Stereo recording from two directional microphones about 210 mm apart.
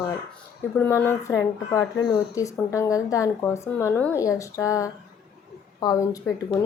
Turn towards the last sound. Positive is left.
turn(degrees=15)  # may be behind; listen again after turning